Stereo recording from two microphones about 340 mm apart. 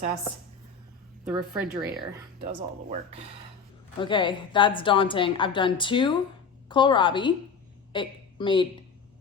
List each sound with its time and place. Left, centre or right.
1.3 s speech: centre
2.4 s speech: centre
3.9 s a woman's voice: centre